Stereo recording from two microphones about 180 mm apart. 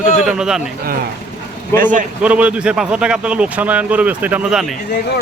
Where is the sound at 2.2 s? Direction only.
5° right (ahead or behind).